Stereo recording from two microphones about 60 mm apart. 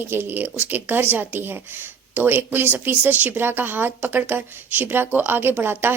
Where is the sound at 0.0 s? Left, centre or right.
Right.